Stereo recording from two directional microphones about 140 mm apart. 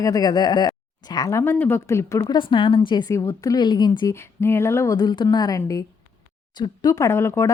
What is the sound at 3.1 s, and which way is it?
Speech, 20° left (ahead or behind).